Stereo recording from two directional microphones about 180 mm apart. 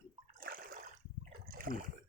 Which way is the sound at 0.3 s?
55° right (ahead or behind).